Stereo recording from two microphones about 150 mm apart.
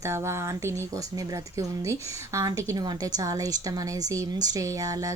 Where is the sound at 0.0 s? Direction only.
20° right (ahead or behind).